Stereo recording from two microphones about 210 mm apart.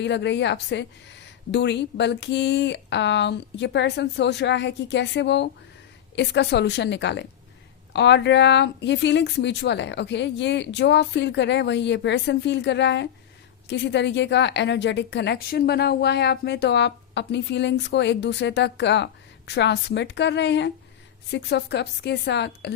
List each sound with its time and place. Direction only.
0.0 s a woman's voice: 55° left (ahead or behind)